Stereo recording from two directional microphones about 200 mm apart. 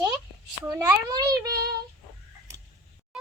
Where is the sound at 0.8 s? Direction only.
20° right (ahead or behind).